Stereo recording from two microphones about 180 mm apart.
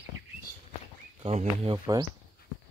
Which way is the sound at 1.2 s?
35° right (ahead or behind).